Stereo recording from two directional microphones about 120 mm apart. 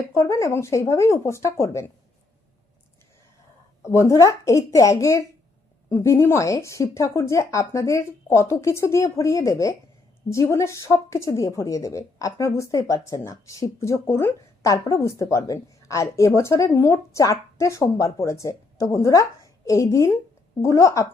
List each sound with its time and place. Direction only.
0.1 s speech: 25° left (ahead or behind)
3.8 s speech: 25° left (ahead or behind)